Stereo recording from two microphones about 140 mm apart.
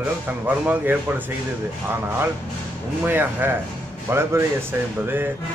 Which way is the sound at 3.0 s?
15° right (ahead or behind).